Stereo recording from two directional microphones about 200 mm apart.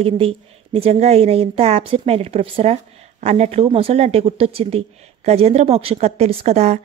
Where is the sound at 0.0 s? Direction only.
30° right (ahead or behind).